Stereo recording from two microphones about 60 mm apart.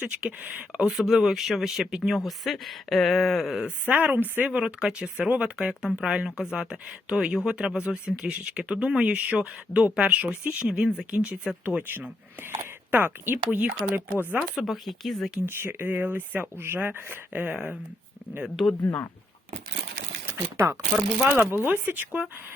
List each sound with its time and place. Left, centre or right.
0.2 s speech: centre
3.8 s speech: right
4.4 s speech: centre
11.8 s speech: right
14.3 s speech: centre
15.4 s speech: right
17.5 s speech: centre
18.6 s speech: centre
18.9 s speech: left
20.3 s speech: right
21.5 s speech: right